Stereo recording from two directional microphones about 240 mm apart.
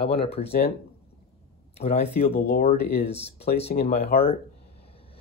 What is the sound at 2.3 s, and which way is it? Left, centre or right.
Speech, left.